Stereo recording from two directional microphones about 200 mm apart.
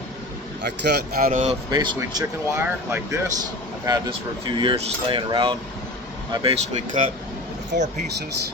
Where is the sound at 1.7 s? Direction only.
20° right (ahead or behind); by 8.0 s 35° right (ahead or behind).